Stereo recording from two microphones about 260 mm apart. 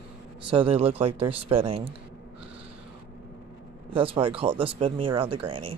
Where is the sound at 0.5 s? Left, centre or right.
Right.